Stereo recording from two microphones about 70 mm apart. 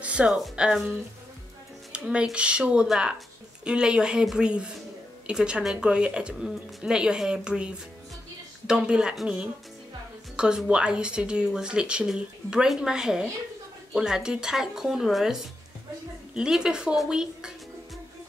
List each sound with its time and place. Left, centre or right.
0.0 s music: centre
0.3 s speech: centre
1.9 s a sound: centre
2.3 s speech: centre